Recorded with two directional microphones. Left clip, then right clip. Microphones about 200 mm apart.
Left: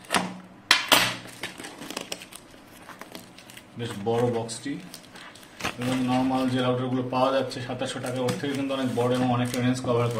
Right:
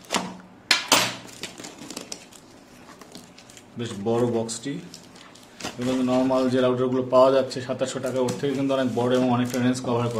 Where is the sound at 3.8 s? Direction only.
60° right (ahead or behind).